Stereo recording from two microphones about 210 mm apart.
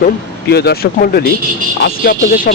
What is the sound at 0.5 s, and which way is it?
Speech, 50° left (ahead or behind).